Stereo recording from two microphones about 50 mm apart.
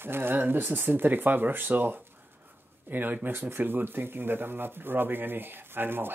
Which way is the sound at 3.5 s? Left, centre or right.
Right.